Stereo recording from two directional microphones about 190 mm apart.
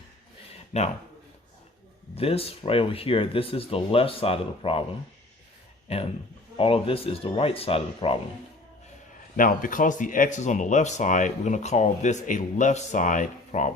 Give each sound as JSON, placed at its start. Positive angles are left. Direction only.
{"t": 0.7, "sound": "speech", "side_deg": 35}
{"t": 2.1, "sound": "speech", "side_deg": 30}
{"t": 5.9, "sound": "speech", "side_deg": 30}
{"t": 9.3, "sound": "speech", "side_deg": 45}